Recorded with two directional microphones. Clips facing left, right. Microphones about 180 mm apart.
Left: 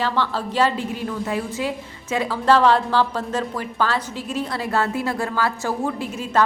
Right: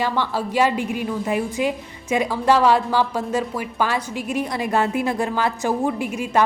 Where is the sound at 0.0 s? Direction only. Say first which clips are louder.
Right 1 dB; 15° right (ahead or behind).